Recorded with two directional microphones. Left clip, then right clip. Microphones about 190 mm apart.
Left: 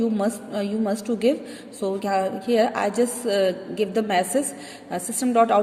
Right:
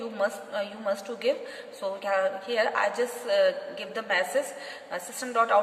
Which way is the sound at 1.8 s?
45° left (ahead or behind).